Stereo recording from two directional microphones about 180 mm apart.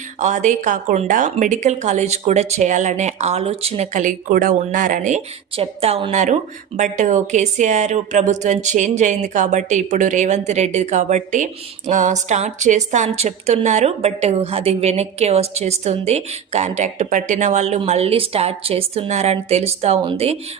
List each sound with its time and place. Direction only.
0.2 s a woman's voice: 40° right (ahead or behind)
5.5 s a woman's voice: 30° right (ahead or behind)